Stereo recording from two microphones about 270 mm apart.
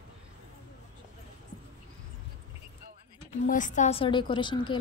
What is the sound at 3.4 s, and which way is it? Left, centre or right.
A woman's voice, left.